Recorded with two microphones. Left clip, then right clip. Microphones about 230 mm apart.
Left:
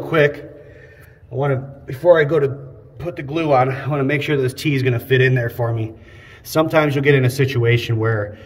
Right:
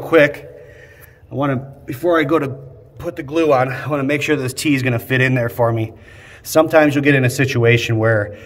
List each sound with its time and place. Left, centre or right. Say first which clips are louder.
0.0 s a man's voice: right 4 dB; right
1.4 s a man's voice: right 1 dB; right
3.0 s a man's voice: right 4 dB; right
6.4 s speech: right 4 dB; right